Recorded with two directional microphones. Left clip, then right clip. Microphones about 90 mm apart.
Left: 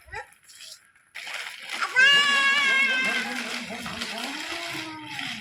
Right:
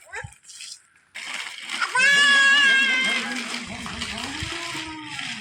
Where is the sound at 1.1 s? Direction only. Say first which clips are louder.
Right 3 dB; 20° right (ahead or behind).